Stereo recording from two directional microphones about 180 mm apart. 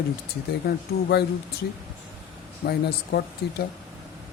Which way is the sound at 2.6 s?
60° left (ahead or behind).